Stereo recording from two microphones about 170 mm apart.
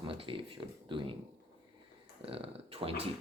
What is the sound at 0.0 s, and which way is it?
Speech, 30° right (ahead or behind).